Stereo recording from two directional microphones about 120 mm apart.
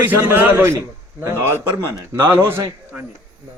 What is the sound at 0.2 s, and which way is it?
A man's voice, 20° right (ahead or behind).